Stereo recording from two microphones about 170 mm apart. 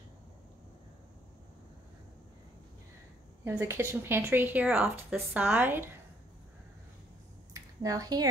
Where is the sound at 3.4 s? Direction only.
15° right (ahead or behind).